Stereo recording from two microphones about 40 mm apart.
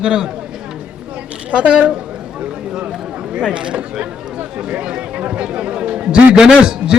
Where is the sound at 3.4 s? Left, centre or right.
Right.